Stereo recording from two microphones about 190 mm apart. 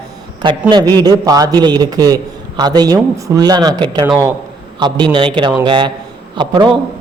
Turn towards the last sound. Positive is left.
turn(degrees=-25)  # may be behind; listen again after turning